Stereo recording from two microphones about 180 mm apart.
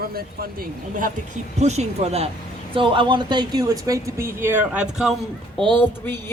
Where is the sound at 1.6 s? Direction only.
40° right (ahead or behind); by 5.1 s 5° right (ahead or behind).